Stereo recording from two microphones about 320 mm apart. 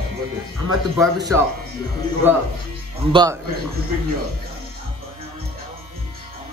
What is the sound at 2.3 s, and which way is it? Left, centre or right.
A man's voice, centre.